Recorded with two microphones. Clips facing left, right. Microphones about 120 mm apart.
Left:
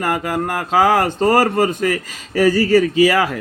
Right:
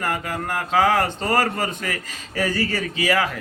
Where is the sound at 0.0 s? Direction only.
40° left (ahead or behind).